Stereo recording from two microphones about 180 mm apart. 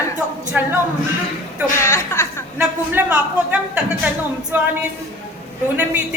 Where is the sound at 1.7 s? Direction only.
15° left (ahead or behind).